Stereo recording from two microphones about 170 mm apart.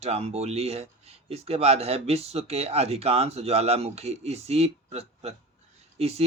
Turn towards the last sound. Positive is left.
turn(degrees=-40)  # may be behind; listen again after turning